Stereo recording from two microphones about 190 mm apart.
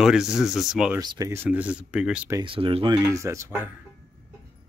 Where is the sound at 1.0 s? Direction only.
20° right (ahead or behind).